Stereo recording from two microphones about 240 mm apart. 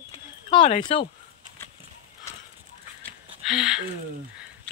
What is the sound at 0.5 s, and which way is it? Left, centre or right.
Speech, left.